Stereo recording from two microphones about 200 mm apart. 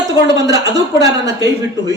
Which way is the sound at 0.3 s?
20° right (ahead or behind).